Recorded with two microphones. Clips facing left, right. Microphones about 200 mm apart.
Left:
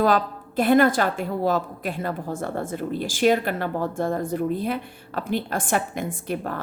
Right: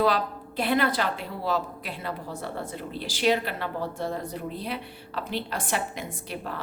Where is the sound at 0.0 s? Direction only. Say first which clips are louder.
Left 4 dB; 50° left (ahead or behind).